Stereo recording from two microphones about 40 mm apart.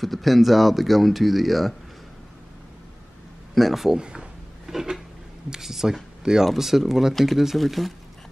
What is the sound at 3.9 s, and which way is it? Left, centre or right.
Speech, right.